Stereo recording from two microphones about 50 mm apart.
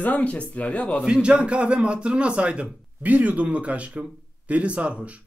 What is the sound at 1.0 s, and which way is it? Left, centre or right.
A man's voice, centre.